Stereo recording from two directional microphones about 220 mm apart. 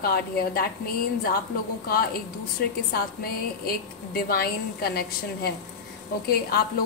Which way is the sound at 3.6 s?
45° left (ahead or behind).